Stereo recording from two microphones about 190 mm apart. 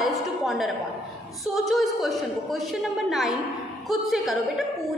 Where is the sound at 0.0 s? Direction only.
Centre (ahead or behind).